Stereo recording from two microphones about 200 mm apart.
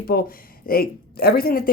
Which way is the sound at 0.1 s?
50° left (ahead or behind).